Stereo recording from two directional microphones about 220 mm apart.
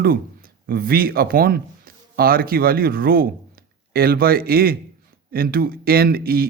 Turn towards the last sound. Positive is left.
turn(degrees=-45)  # may be behind; listen again after turning